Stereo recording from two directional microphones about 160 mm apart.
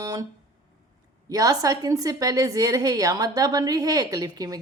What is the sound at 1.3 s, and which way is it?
A woman's voice, 20° right (ahead or behind).